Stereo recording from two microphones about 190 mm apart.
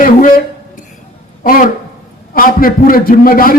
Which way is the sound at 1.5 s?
45° left (ahead or behind).